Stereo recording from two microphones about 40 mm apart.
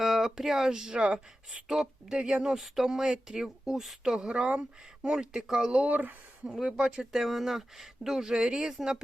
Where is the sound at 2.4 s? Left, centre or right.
Centre.